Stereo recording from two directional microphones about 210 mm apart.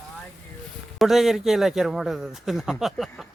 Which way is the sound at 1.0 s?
Centre (ahead or behind).